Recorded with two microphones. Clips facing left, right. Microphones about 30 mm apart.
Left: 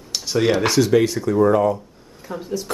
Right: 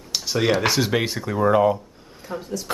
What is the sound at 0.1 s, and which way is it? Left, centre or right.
Speech, centre.